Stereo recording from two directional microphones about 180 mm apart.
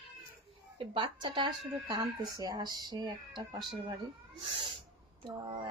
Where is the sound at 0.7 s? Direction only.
30° right (ahead or behind).